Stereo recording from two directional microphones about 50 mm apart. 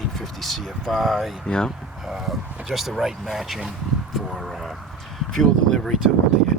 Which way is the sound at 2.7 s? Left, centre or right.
Centre.